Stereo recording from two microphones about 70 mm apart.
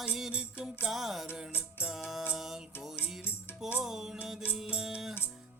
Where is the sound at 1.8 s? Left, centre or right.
Centre.